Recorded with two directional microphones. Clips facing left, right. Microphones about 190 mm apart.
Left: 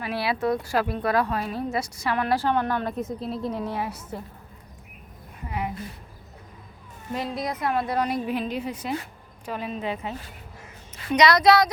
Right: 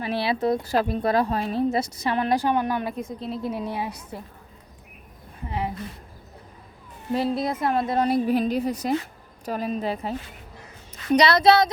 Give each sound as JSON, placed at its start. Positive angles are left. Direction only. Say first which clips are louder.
{"t": 0.0, "sound": "speech", "louder": "right 2 dB", "side_deg": -25}
{"t": 2.9, "sound": "a woman's voice", "louder": "left 1 dB", "side_deg": 0}
{"t": 3.5, "sound": "a woman's voice", "louder": "even", "side_deg": -15}
{"t": 5.5, "sound": "a sound", "louder": "right 1 dB", "side_deg": -30}
{"t": 7.1, "sound": "a woman's voice", "louder": "right 5 dB", "side_deg": -30}
{"t": 10.9, "sound": "a sound", "louder": "right 1 dB", "side_deg": -35}
{"t": 11.3, "sound": "speech", "louder": "left 1 dB", "side_deg": -30}